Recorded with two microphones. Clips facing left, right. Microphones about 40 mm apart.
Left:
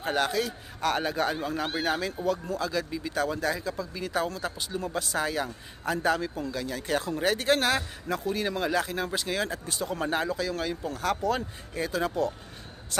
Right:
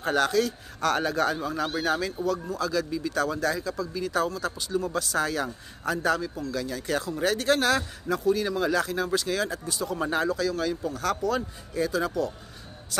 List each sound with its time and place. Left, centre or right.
0.0 s a man's voice: centre
9.7 s speech: left
9.9 s speech: centre